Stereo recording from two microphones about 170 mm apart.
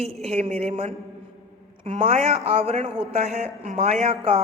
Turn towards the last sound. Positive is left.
turn(degrees=-35)  # may be behind; listen again after turning